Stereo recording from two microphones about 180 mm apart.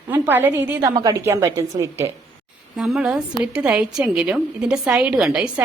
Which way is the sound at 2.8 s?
5° right (ahead or behind).